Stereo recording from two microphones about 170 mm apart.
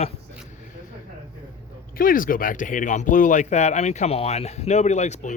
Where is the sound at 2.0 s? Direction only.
55° left (ahead or behind).